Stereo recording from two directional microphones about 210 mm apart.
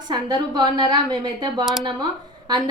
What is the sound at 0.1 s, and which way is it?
A woman's voice, 20° right (ahead or behind).